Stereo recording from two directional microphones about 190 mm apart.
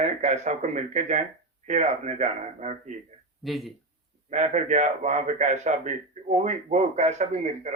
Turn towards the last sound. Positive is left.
turn(degrees=-40)  # may be behind; listen again after turning